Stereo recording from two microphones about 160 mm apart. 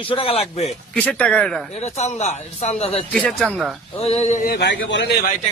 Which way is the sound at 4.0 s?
40° left (ahead or behind).